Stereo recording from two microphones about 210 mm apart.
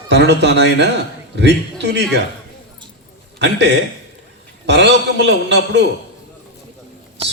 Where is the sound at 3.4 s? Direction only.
55° right (ahead or behind).